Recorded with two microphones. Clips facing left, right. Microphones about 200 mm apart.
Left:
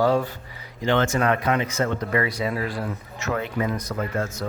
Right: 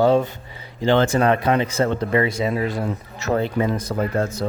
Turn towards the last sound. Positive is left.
turn(degrees=-30)  # may be behind; listen again after turning